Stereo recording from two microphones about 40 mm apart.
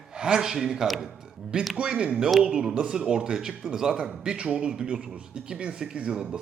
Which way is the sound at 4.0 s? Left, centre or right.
Right.